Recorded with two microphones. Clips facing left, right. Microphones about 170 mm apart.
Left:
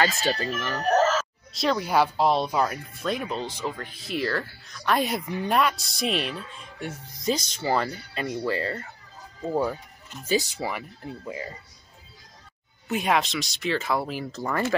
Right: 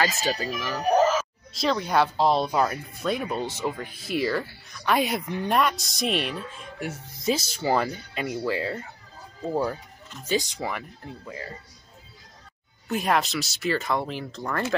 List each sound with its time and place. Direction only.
0.0 s speech: 5° right (ahead or behind)
1.5 s speech: centre (ahead or behind)
3.4 s speech: 20° right (ahead or behind)
3.7 s speech: 5° right (ahead or behind); by 11.5 s 15° left (ahead or behind)
12.8 s speech: centre (ahead or behind)